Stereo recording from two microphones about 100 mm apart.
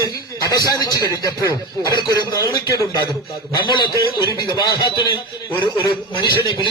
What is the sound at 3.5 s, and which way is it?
A man's voice, 50° left (ahead or behind).